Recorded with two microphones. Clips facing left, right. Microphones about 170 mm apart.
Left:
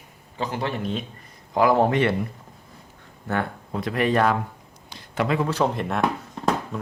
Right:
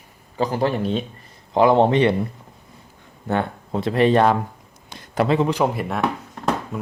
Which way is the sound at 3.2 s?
25° right (ahead or behind).